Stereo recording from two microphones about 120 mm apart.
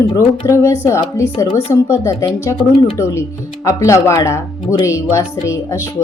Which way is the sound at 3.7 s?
25° left (ahead or behind).